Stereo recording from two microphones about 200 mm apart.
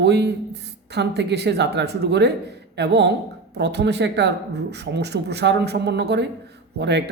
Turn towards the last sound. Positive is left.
turn(degrees=-60)  # may be behind; listen again after turning